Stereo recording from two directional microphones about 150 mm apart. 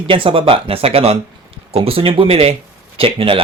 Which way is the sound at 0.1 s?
35° right (ahead or behind).